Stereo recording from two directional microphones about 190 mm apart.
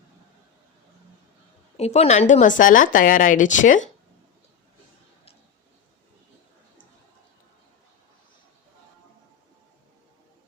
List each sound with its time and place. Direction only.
1.7 s a woman's voice: 35° left (ahead or behind)